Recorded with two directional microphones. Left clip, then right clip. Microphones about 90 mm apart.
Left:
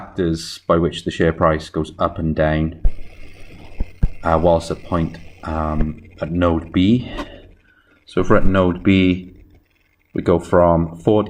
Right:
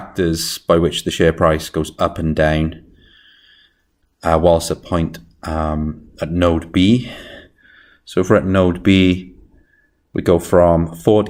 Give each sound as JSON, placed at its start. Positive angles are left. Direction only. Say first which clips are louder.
{"t": 0.0, "sound": "speech", "louder": "right 3 dB", "side_deg": -25}
{"t": 4.2, "sound": "speech", "louder": "right 2 dB", "side_deg": -25}